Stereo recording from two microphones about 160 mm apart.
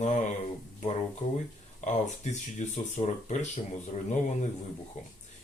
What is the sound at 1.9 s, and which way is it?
Speech, 50° left (ahead or behind).